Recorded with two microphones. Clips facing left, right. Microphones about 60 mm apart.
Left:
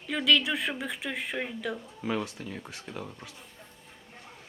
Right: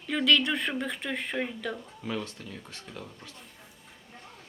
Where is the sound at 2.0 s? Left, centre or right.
Centre.